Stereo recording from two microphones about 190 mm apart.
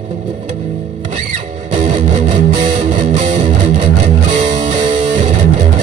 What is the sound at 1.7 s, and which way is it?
Music, 40° right (ahead or behind).